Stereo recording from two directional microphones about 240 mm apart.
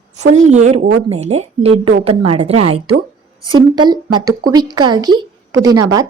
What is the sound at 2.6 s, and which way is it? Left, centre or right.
Speech, right.